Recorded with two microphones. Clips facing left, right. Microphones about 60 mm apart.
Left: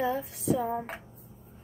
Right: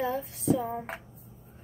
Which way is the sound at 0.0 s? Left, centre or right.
Centre.